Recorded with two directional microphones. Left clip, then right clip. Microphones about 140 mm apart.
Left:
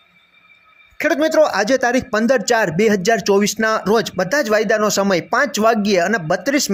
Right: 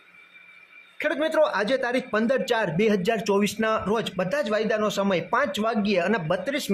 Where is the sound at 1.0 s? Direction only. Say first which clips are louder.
Left 8 dB; 35° left (ahead or behind).